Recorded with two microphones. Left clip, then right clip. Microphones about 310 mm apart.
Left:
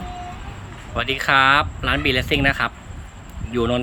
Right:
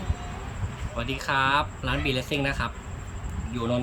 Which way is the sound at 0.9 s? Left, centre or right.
Centre.